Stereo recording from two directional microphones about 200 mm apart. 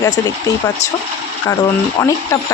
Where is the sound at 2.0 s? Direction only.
15° left (ahead or behind).